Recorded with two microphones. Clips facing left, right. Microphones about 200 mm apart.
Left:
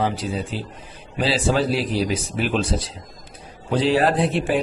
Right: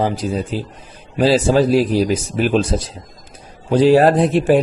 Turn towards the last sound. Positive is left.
turn(degrees=-40)  # may be behind; listen again after turning